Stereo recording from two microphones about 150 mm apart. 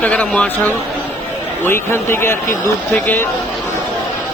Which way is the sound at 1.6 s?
15° left (ahead or behind).